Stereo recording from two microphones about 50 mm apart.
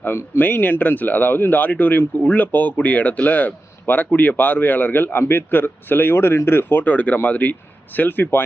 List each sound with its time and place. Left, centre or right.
0.3 s speech: left